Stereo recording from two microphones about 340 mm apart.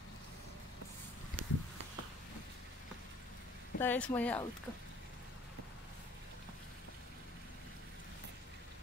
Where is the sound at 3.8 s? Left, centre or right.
Centre.